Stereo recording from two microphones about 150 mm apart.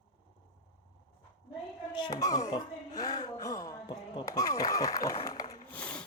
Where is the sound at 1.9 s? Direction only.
30° left (ahead or behind).